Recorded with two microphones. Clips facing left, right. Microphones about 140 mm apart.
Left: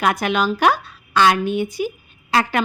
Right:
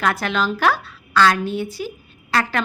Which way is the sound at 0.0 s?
15° left (ahead or behind).